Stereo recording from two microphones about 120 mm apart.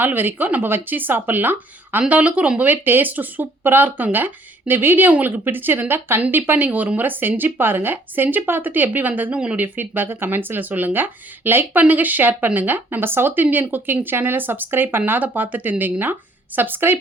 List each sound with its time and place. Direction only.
0.0 s speech: 15° right (ahead or behind)